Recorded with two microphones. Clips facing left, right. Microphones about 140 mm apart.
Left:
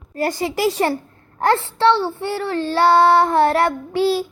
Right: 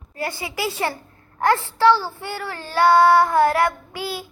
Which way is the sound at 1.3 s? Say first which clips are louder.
Left 2 dB; 25° left (ahead or behind).